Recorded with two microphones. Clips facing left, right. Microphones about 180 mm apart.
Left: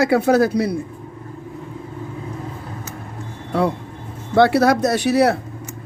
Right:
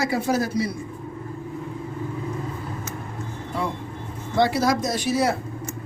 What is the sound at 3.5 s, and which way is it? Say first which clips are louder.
Vehicle: left 9 dB; 70° left (ahead or behind).